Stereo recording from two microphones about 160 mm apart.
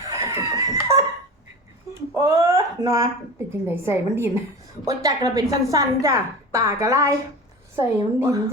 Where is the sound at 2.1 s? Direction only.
15° right (ahead or behind).